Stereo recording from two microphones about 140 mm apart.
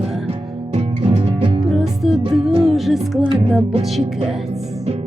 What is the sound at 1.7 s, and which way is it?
Music, centre (ahead or behind).